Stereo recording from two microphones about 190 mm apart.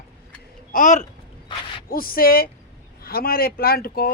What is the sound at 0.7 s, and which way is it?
Speech, 40° left (ahead or behind).